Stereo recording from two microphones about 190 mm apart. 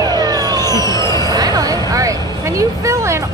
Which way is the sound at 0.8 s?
15° left (ahead or behind).